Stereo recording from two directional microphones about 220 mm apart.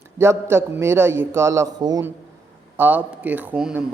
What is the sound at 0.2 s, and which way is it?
A man's voice, 10° right (ahead or behind).